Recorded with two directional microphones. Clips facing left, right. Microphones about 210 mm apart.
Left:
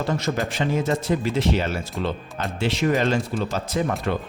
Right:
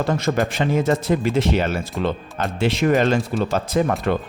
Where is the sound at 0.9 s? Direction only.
55° right (ahead or behind).